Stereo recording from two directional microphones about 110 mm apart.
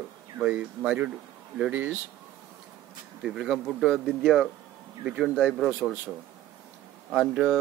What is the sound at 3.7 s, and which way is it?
Speech, 5° left (ahead or behind).